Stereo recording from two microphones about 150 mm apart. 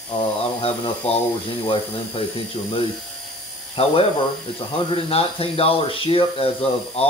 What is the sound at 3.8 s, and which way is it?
Speech, 40° left (ahead or behind).